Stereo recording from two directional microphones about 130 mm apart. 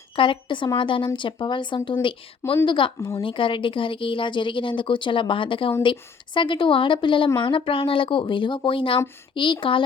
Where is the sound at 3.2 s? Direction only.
40° left (ahead or behind).